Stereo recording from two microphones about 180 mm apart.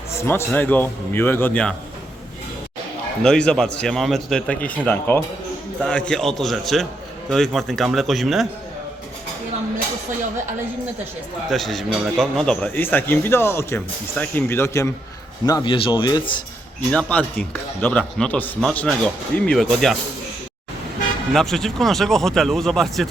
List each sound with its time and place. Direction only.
0.2 s a man's voice: 15° left (ahead or behind)
3.2 s a man's voice: 5° left (ahead or behind)
11.4 s a man's voice: centre (ahead or behind); by 16.4 s 25° left (ahead or behind)
16.9 s a man's voice: 5° left (ahead or behind)
21.3 s speech: centre (ahead or behind)